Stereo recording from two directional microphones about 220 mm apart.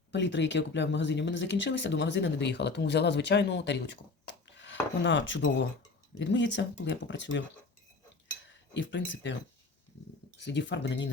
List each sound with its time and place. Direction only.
0.1 s speech: 55° left (ahead or behind)
8.7 s speech: 55° left (ahead or behind)
10.3 s speech: 55° left (ahead or behind)